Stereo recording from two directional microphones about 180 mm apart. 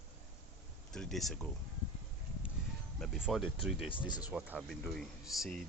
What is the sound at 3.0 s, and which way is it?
Speech, centre (ahead or behind).